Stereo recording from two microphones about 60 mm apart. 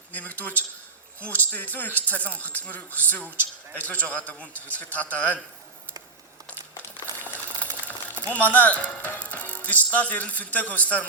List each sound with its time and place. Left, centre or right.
0.1 s speech: left
6.5 s a sound: left
8.3 s speech: left